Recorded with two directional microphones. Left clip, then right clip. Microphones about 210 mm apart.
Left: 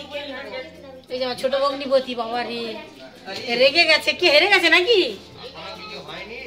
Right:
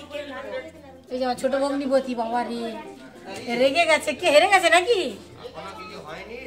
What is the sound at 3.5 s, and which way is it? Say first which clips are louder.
A woman's voice: left 3 dB; 10° left (ahead or behind).